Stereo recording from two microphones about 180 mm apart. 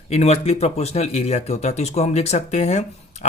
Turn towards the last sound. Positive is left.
turn(degrees=35)  # may be behind; listen again after turning